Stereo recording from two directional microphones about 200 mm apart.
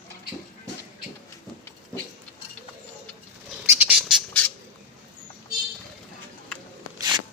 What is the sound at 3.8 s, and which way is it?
Squawk, centre (ahead or behind).